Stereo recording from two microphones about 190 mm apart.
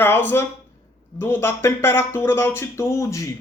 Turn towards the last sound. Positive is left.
turn(degrees=15)  # may be behind; listen again after turning